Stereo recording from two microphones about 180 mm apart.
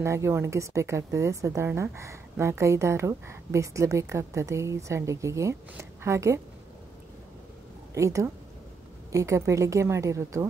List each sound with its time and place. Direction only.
0.0 s speech: 15° right (ahead or behind)
7.9 s a woman's voice: 15° right (ahead or behind)